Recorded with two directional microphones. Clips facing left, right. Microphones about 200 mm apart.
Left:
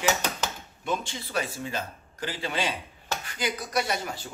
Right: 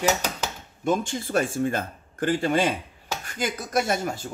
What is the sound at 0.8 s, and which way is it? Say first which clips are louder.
Speech: right 7 dB; 45° right (ahead or behind).